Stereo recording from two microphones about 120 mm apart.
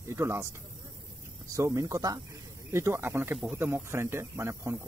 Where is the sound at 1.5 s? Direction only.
25° right (ahead or behind).